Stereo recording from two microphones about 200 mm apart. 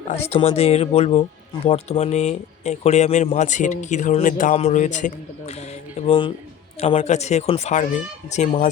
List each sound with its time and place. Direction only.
0.1 s speech: 30° left (ahead or behind)
6.0 s speech: 25° left (ahead or behind)